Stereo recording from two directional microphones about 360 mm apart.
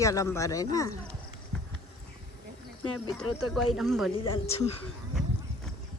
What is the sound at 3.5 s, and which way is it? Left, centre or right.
Speech, centre.